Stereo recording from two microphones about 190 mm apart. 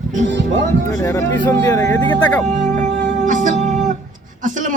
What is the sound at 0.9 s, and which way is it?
Speech, 15° left (ahead or behind).